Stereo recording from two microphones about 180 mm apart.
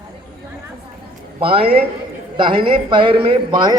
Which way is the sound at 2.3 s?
25° right (ahead or behind).